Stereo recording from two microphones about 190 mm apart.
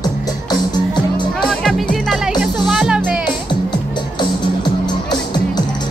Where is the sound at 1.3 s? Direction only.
Centre (ahead or behind).